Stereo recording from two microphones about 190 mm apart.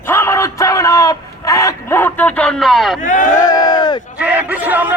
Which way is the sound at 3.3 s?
20° left (ahead or behind).